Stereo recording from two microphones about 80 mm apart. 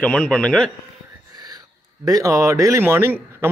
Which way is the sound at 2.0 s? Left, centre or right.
Right.